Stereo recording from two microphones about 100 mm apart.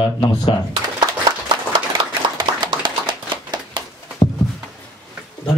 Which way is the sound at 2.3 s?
45° right (ahead or behind).